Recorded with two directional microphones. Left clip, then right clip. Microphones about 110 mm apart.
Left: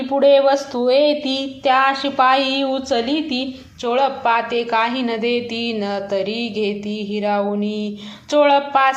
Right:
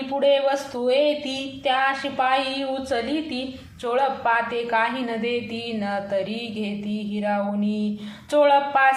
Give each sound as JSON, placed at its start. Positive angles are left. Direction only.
{"t": 0.2, "sound": "a woman's voice", "side_deg": 40}